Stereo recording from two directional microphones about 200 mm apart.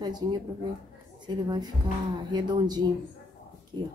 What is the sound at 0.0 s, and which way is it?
Speech, 20° right (ahead or behind).